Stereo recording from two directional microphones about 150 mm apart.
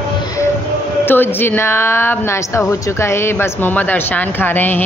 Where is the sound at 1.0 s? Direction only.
15° left (ahead or behind).